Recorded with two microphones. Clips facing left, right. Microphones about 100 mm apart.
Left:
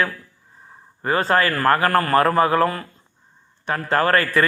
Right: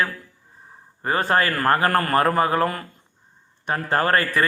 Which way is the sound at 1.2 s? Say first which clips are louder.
Left 2 dB; 25° right (ahead or behind).